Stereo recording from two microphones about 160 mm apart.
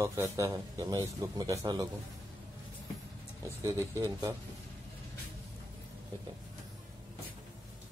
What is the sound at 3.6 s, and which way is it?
Speech, 20° right (ahead or behind).